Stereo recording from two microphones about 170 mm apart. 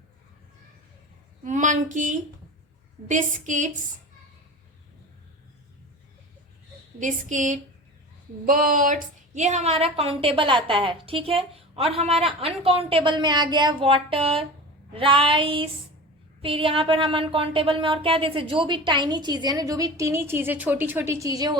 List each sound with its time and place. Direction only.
1.5 s a woman's voice: 50° right (ahead or behind)
7.0 s a woman's voice: 50° right (ahead or behind); by 21.6 s 25° right (ahead or behind)